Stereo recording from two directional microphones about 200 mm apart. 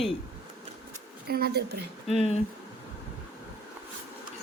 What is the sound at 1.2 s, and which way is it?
Speech, 50° right (ahead or behind).